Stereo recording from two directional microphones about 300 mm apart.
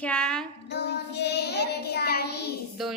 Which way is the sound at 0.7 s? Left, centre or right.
Left.